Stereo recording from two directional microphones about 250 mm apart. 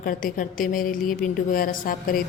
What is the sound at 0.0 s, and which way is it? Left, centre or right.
A woman's voice, left.